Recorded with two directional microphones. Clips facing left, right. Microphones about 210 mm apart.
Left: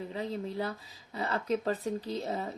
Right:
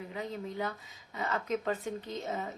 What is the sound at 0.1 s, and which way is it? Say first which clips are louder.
A woman's voice: left 1 dB; 30° left (ahead or behind).